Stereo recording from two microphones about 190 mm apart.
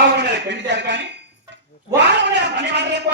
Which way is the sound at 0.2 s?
65° right (ahead or behind).